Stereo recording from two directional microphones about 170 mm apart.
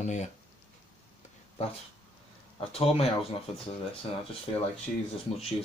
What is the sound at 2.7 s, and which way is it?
Speech, 35° left (ahead or behind).